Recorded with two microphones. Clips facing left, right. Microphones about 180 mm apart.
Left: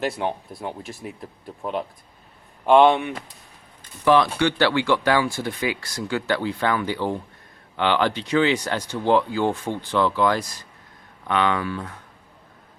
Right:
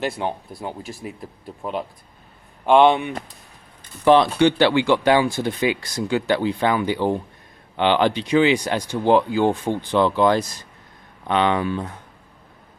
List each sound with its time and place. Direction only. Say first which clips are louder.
0.0 s speech: even; centre (ahead or behind)
4.0 s speech: right 3 dB; 25° right (ahead or behind)